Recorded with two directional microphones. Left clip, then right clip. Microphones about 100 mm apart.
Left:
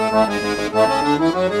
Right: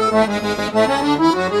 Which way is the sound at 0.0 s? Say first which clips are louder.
Right 1 dB; 35° left (ahead or behind).